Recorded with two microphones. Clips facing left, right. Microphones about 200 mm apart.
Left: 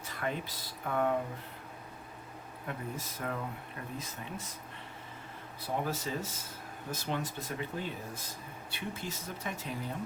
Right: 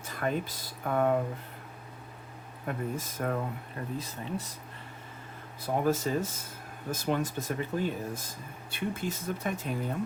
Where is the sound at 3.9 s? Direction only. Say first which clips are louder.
Right 7 dB; 35° right (ahead or behind).